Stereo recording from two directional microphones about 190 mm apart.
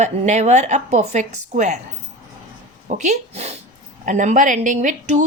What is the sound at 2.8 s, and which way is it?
A woman's voice, 40° right (ahead or behind).